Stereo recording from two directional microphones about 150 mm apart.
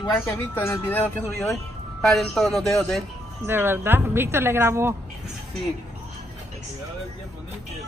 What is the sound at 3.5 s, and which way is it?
Speech, 15° right (ahead or behind).